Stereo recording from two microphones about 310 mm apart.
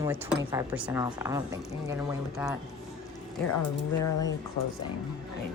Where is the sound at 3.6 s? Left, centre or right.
Left.